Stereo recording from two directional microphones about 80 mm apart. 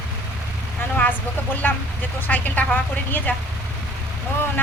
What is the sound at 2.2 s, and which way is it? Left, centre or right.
Speech, left.